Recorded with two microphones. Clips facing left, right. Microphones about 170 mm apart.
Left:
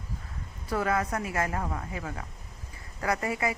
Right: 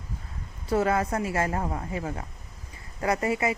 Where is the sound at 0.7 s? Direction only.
25° right (ahead or behind).